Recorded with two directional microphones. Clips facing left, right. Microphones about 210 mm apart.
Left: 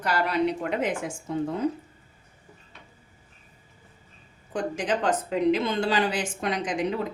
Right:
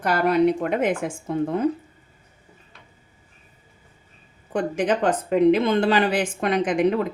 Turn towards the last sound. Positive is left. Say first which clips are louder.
# right 7 dB
turn(degrees=-60)  # may be behind; listen again after turning